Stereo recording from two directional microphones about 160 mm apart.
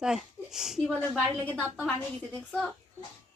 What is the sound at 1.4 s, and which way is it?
Speech, 10° left (ahead or behind).